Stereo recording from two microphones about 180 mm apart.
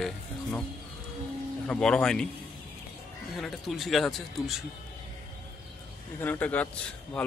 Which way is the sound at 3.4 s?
Centre (ahead or behind).